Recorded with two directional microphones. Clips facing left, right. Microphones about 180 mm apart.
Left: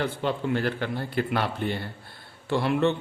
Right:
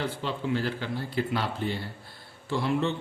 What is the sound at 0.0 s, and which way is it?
A man's voice, 55° left (ahead or behind).